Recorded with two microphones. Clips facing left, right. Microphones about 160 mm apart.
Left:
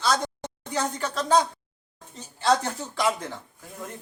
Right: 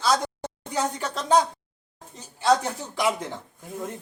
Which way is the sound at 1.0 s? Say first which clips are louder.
Left 1 dB; 20° right (ahead or behind).